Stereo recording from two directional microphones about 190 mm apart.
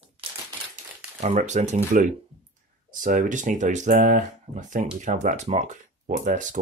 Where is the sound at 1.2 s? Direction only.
35° right (ahead or behind).